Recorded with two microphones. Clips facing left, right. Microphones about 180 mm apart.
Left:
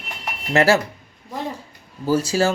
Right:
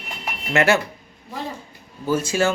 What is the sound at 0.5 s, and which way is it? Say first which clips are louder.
Speech: left 2 dB; 35° left (ahead or behind).